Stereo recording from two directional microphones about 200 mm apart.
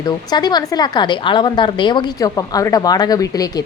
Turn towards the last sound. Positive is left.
turn(degrees=20)  # may be behind; listen again after turning